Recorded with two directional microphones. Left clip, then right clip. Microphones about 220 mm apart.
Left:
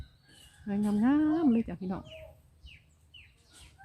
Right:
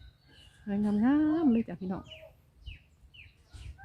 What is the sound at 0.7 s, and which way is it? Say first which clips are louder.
Speech: even; centre (ahead or behind).